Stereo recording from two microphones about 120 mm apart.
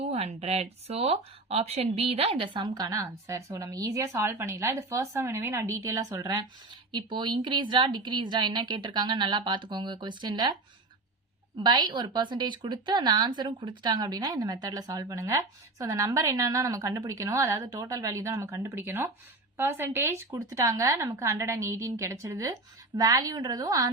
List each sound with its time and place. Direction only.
0.0 s a woman's voice: 60° right (ahead or behind); by 6.4 s 30° right (ahead or behind)
6.9 s speech: 40° right (ahead or behind)
11.6 s a woman's voice: 35° right (ahead or behind)